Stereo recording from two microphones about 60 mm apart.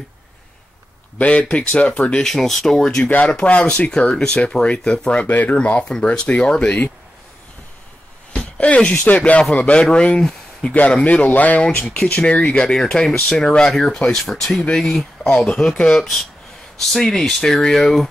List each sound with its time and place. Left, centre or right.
1.1 s speech: left
2.2 s speech: centre
3.0 s speech: left
8.3 s a sound: centre
8.9 s speech: left; by 15.0 s centre
15.2 s speech: centre